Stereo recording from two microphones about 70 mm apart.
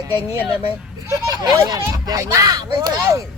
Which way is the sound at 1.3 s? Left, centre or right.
Right.